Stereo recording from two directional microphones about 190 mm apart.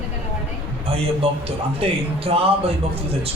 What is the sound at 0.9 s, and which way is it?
A man's voice, 30° right (ahead or behind).